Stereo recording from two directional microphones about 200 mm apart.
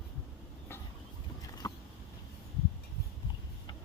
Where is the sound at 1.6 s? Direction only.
20° left (ahead or behind).